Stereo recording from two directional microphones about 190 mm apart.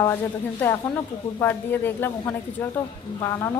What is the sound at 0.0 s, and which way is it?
Speech, 15° left (ahead or behind).